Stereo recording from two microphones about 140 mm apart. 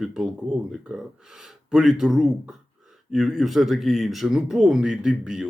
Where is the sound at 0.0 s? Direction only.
5° right (ahead or behind).